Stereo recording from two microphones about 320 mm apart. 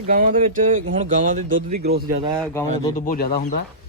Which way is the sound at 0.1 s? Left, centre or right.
Right.